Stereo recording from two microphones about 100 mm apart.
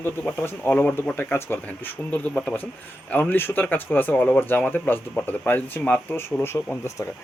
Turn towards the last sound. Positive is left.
turn(degrees=25)  # may be behind; listen again after turning